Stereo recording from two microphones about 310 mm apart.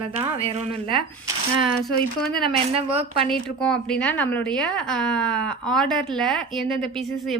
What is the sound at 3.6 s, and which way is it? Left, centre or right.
Speech, centre.